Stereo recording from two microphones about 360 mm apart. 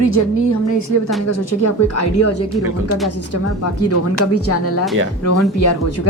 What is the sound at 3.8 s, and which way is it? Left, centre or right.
Speech, left.